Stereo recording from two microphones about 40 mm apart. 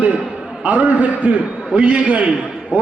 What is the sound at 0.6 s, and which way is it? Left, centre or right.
A man's voice, right.